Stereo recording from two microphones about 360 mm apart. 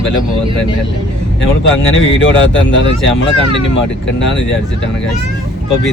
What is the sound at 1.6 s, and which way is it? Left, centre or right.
Speech, left.